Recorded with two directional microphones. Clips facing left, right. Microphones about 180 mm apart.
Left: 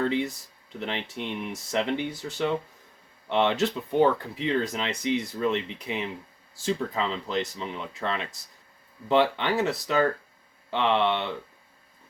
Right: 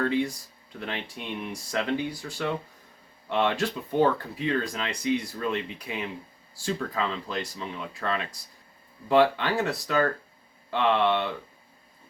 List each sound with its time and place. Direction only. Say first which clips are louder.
0.0 s speech: even; 20° left (ahead or behind)